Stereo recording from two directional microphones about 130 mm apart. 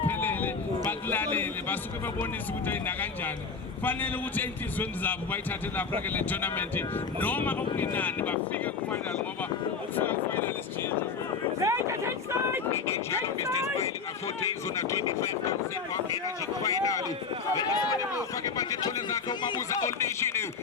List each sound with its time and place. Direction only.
0.1 s a sound: 15° left (ahead or behind)
2.6 s speech: 15° left (ahead or behind)
10.0 s speech: 15° left (ahead or behind)
11.6 s speech: 20° right (ahead or behind)
12.7 s speech: 20° left (ahead or behind)
14.4 s speech: 25° left (ahead or behind)